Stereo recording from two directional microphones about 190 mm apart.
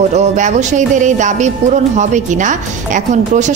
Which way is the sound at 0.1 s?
35° right (ahead or behind).